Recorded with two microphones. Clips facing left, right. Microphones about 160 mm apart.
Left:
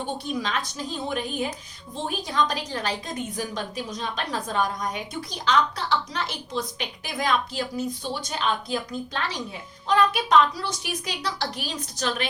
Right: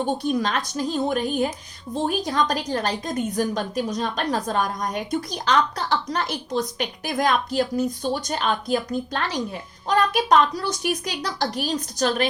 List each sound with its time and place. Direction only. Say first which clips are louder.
0.0 s a woman's voice: right 6 dB; 45° right (ahead or behind)